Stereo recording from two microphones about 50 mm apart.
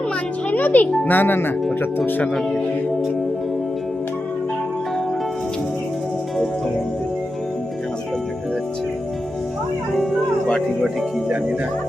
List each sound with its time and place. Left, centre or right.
0.5 s a child's voice: left
10.0 s music: centre